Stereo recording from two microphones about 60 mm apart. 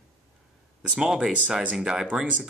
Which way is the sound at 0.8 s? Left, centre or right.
Centre.